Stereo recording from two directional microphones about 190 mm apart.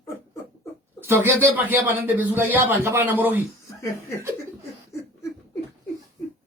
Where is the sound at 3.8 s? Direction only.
15° left (ahead or behind).